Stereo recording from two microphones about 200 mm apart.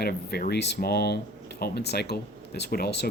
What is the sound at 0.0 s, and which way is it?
Speech, 50° left (ahead or behind).